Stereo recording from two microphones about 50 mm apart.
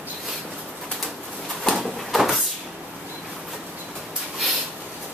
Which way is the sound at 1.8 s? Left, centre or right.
Centre.